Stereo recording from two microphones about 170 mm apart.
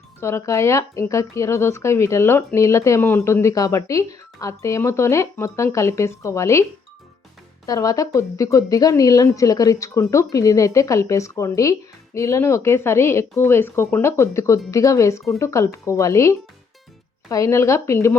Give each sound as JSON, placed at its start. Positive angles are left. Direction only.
{"t": 0.2, "sound": "a woman's voice", "side_deg": 15}
{"t": 7.7, "sound": "a woman's voice", "side_deg": 20}